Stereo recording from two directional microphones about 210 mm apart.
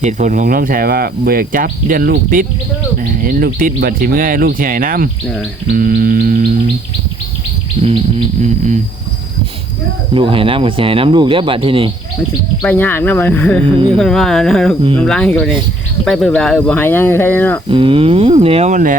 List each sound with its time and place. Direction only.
0.0 s speech: 35° right (ahead or behind)
7.8 s music: 30° right (ahead or behind)
10.2 s speech: 25° right (ahead or behind)
12.6 s speech: 10° left (ahead or behind)
17.7 s speech: 25° right (ahead or behind)